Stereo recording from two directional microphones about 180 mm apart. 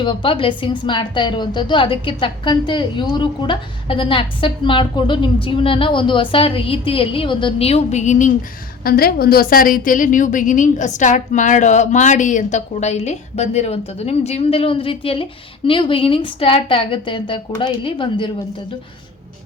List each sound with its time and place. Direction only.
0.0 s a woman's voice: 30° left (ahead or behind)
8.8 s a woman's voice: 55° left (ahead or behind); by 18.3 s 30° left (ahead or behind)